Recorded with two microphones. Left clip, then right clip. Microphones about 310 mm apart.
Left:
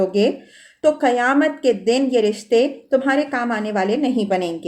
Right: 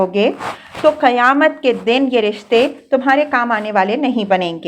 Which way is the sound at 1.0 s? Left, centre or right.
Centre.